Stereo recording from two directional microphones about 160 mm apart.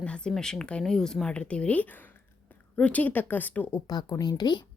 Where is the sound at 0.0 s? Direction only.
5° left (ahead or behind); by 4.6 s 25° left (ahead or behind).